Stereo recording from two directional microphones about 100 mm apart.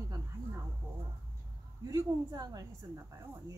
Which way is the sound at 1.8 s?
35° right (ahead or behind).